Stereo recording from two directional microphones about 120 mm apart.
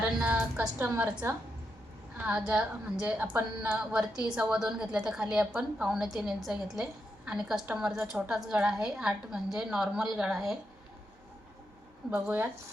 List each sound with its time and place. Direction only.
0.0 s a sound: 10° right (ahead or behind)
0.8 s a woman's voice: 15° right (ahead or behind)
2.1 s a woman's voice: 10° right (ahead or behind)
12.1 s a woman's voice: 15° right (ahead or behind)